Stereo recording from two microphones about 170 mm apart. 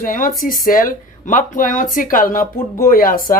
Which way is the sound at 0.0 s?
55° left (ahead or behind).